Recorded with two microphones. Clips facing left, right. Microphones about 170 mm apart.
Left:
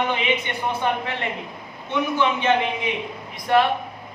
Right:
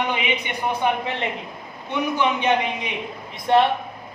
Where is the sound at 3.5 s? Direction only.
25° right (ahead or behind).